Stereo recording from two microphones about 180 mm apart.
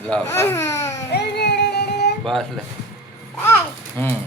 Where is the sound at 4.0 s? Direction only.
10° left (ahead or behind).